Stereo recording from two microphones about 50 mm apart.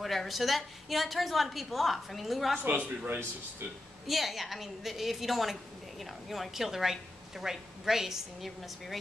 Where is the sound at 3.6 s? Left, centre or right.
Right.